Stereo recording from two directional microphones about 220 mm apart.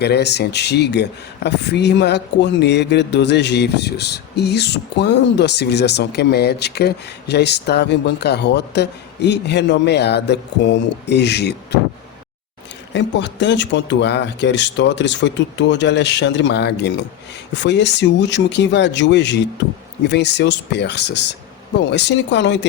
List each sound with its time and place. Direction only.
0.0 s speech: 50° left (ahead or behind)
12.9 s speech: 55° left (ahead or behind)